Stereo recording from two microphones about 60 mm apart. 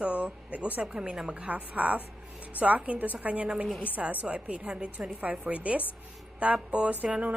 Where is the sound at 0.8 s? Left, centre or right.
Centre.